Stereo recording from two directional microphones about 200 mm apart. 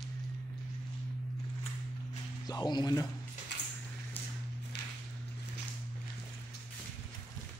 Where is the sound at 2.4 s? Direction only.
20° left (ahead or behind).